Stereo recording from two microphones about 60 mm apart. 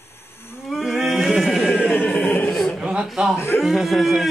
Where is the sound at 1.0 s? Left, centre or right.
Centre.